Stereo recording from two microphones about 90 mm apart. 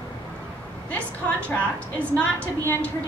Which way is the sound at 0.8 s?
15° left (ahead or behind).